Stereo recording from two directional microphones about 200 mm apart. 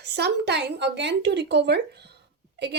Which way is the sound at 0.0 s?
55° right (ahead or behind).